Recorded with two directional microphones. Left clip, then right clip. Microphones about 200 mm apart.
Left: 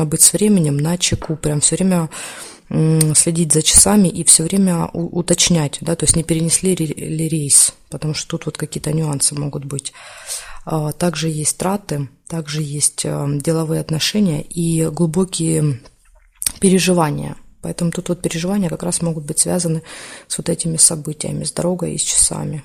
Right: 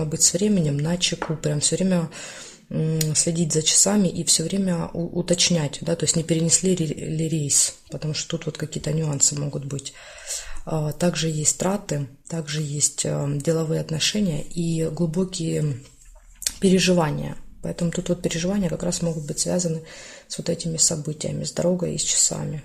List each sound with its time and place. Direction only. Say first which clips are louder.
0.0 s speech: left 6 dB; 45° left (ahead or behind)
16.4 s speech: left 4 dB; 35° left (ahead or behind)